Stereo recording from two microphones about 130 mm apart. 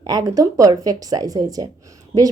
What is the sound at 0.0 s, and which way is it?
A woman's voice, 30° right (ahead or behind).